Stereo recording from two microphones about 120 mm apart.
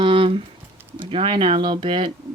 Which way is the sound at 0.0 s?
45° right (ahead or behind).